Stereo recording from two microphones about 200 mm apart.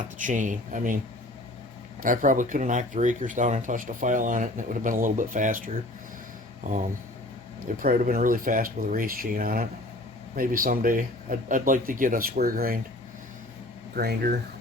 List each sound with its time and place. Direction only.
0.2 s speech: 40° right (ahead or behind)
2.0 s speech: 40° right (ahead or behind)
13.9 s speech: 50° right (ahead or behind)